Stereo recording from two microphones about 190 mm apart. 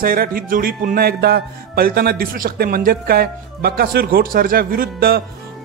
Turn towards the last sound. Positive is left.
turn(degrees=-55)  # may be behind; listen again after turning